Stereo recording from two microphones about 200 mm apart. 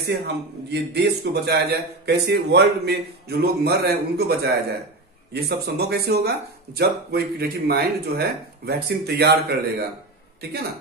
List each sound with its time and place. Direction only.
0.1 s speech: 55° right (ahead or behind)